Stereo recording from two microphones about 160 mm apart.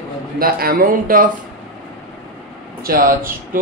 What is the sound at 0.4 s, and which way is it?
Speech, 65° right (ahead or behind).